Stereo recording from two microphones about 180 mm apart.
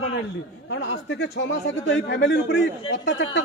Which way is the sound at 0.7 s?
85° left.